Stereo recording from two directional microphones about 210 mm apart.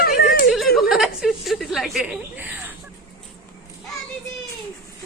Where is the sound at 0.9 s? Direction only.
Centre (ahead or behind).